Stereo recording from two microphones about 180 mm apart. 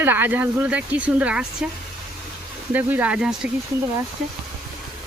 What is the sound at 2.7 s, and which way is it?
Speech, 10° right (ahead or behind).